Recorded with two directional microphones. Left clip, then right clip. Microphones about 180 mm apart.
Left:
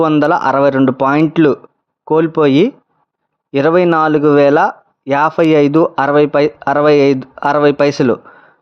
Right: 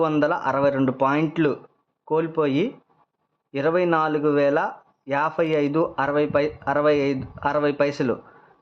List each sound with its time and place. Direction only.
0.0 s speech: 50° left (ahead or behind)